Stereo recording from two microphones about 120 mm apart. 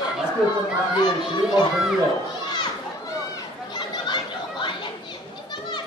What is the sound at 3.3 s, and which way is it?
Chatter, 35° left (ahead or behind).